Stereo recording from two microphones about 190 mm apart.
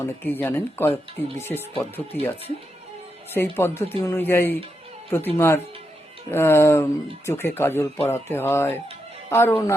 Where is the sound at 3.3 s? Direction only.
10° left (ahead or behind).